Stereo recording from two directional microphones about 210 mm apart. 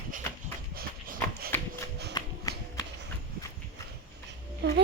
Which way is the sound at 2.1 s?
20° left (ahead or behind).